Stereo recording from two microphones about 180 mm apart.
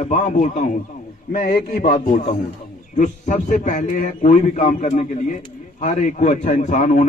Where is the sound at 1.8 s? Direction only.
50° left (ahead or behind).